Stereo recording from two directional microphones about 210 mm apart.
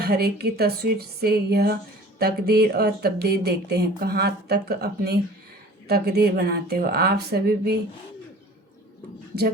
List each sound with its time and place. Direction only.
0.0 s speech: 50° right (ahead or behind)